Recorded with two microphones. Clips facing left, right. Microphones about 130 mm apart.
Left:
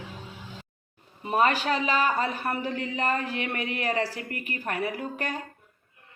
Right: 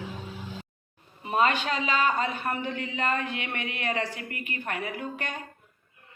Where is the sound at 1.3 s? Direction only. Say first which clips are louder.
Left 1 dB; 40° left (ahead or behind).